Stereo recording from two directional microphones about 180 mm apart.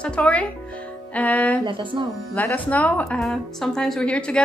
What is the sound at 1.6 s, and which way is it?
Speech, 25° right (ahead or behind).